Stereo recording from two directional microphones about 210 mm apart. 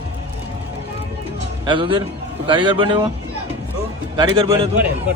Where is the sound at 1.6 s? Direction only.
25° right (ahead or behind).